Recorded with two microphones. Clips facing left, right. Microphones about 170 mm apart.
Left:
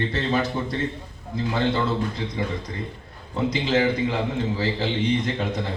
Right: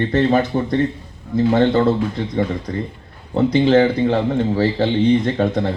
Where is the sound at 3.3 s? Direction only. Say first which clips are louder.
Right 9 dB; 55° right (ahead or behind).